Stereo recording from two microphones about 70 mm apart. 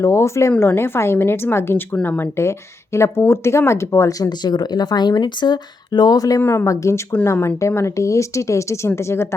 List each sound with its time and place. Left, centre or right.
0.0 s speech: left
4.2 s speech: left
6.4 s a woman's voice: left
6.7 s speech: left